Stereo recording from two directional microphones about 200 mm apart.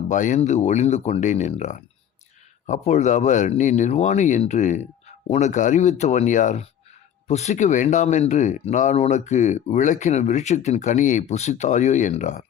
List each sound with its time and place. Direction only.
0.1 s speech: 40° left (ahead or behind)